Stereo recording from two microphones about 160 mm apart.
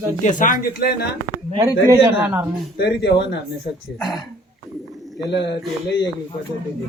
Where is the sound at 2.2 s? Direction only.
10° right (ahead or behind).